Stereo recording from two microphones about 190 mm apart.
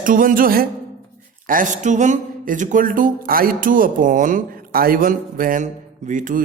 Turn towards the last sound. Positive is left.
turn(degrees=-45)  # may be behind; listen again after turning